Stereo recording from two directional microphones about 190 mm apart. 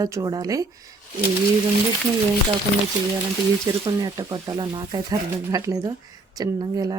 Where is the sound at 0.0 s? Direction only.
15° right (ahead or behind).